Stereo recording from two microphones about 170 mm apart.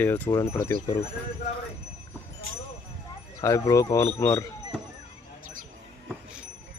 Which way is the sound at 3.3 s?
20° left (ahead or behind).